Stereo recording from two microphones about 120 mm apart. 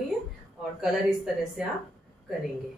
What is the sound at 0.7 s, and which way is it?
Speech, 5° right (ahead or behind).